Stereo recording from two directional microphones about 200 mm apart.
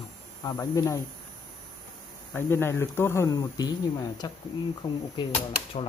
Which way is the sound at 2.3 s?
10° left (ahead or behind).